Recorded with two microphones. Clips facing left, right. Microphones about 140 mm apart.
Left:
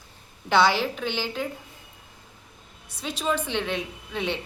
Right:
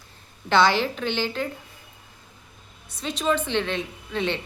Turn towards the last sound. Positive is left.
turn(degrees=10)  # may be behind; listen again after turning